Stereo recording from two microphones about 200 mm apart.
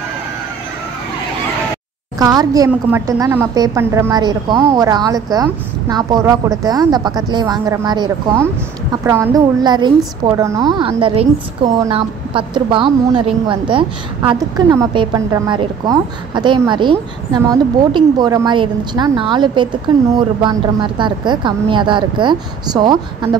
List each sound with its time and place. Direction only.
2.1 s a woman's voice: 20° right (ahead or behind)